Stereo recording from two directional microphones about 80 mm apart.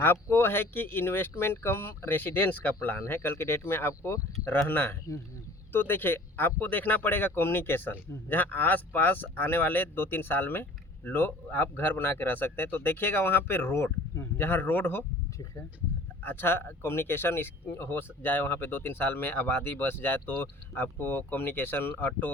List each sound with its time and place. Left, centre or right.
0.0 s speech: left
16.2 s speech: left